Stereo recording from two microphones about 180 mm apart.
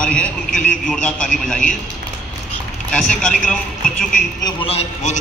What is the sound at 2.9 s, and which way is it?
A man's voice, 5° left (ahead or behind).